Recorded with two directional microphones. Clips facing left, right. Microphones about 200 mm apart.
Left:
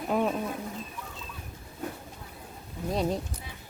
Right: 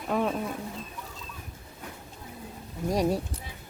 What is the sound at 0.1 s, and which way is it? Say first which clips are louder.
Speech: even; 5° left (ahead or behind).